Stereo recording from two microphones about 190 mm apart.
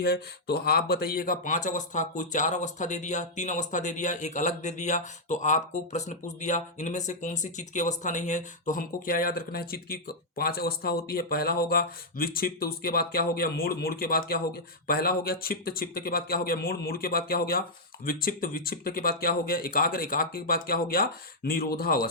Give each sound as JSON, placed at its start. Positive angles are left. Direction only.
{"t": 0.0, "sound": "speech", "side_deg": 55}